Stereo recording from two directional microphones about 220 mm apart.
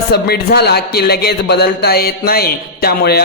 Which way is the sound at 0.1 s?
45° left (ahead or behind).